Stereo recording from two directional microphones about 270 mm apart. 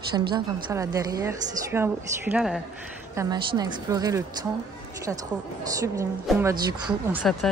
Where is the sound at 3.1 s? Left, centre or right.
Centre.